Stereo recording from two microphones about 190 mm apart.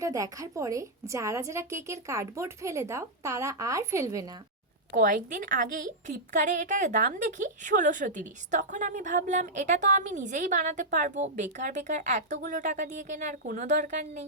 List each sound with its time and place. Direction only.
0.0 s a woman's voice: 15° right (ahead or behind)
4.9 s a woman's voice: 45° right (ahead or behind)